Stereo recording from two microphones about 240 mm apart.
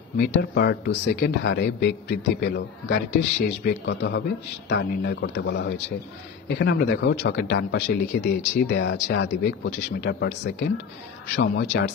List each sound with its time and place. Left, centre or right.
0.2 s speech: left